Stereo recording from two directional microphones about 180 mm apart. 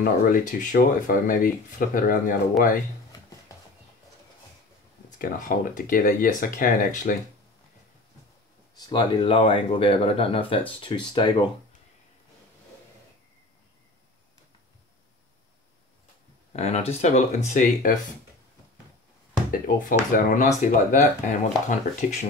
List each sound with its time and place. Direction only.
0.0 s speech: 50° left (ahead or behind)
5.2 s speech: 50° left (ahead or behind)
8.7 s speech: 25° left (ahead or behind)
16.5 s speech: 35° left (ahead or behind)
19.5 s speech: 50° left (ahead or behind)